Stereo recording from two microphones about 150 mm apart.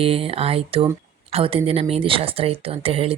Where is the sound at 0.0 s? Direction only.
40° right (ahead or behind).